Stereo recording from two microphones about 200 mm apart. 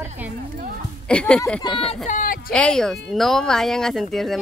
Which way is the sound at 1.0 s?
5° left (ahead or behind).